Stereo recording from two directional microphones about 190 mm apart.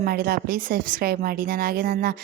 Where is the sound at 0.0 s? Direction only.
50° right (ahead or behind).